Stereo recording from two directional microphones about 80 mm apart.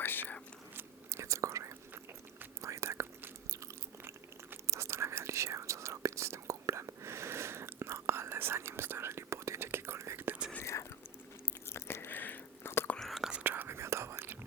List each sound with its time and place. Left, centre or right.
0.0 s whispering: left
0.8 s whispering: right
3.5 s biting: right
4.6 s whispering: right
10.6 s whispering: left
11.7 s biting: left
13.0 s whispering: centre
13.4 s whispering: right